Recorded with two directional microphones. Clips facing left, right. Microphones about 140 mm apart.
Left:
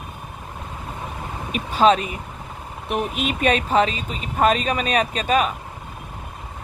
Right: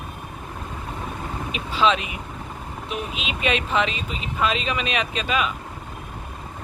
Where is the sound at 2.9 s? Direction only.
50° left (ahead or behind).